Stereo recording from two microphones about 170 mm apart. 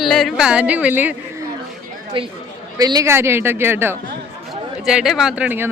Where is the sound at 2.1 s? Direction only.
30° right (ahead or behind); by 3.9 s 15° right (ahead or behind).